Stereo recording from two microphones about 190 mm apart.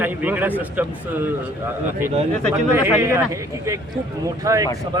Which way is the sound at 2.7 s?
15° right (ahead or behind).